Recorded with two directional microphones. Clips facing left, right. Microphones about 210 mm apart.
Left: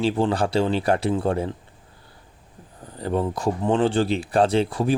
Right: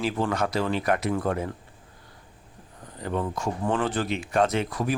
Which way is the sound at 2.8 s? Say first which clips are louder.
Left 5 dB; 35° left (ahead or behind).